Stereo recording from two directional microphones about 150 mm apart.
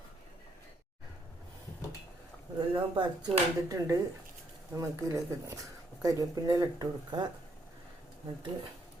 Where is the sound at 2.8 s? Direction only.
30° right (ahead or behind).